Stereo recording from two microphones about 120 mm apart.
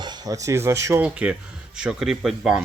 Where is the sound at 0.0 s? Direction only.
35° right (ahead or behind).